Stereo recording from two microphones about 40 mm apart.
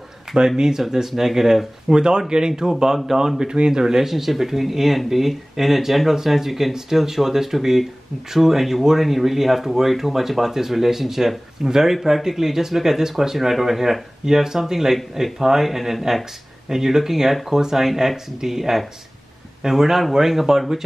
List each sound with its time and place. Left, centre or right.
0.6 s speech: centre